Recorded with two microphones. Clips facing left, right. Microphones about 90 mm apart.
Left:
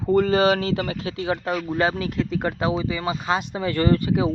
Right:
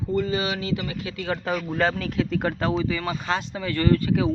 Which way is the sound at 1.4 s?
5° left (ahead or behind).